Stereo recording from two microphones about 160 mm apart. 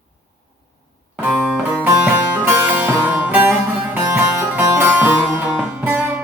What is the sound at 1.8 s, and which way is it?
Music, 10° right (ahead or behind).